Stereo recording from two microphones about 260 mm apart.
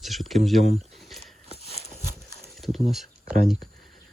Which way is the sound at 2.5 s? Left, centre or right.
Centre.